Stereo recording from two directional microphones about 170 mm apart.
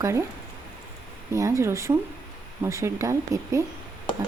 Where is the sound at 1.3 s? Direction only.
15° right (ahead or behind).